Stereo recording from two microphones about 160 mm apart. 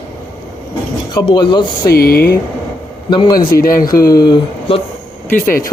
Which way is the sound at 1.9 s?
70° left (ahead or behind).